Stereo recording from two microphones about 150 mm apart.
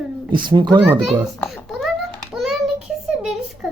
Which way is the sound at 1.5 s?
Centre (ahead or behind).